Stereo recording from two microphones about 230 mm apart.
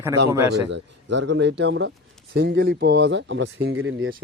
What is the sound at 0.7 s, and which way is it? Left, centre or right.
Speech, right.